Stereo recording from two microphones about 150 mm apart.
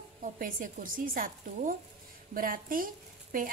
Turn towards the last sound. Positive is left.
turn(degrees=-65)  # may be behind; listen again after turning